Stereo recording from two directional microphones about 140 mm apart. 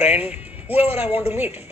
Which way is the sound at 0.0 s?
50° left (ahead or behind).